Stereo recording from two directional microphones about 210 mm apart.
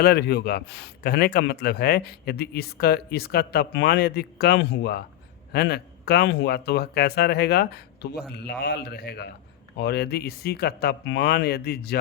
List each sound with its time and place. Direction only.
0.0 s a man's voice: 50° left (ahead or behind)